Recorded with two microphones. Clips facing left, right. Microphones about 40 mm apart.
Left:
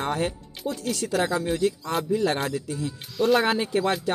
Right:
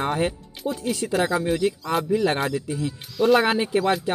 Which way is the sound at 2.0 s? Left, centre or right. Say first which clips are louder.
Right 2 dB; right.